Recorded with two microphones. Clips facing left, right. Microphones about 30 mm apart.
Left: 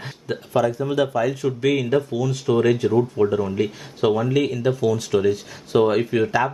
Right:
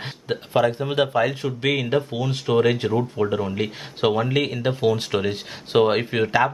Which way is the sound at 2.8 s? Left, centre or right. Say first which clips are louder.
Left 4 dB; right.